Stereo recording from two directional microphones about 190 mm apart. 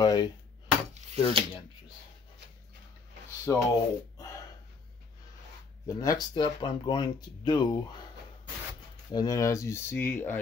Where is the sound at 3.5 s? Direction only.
10° left (ahead or behind).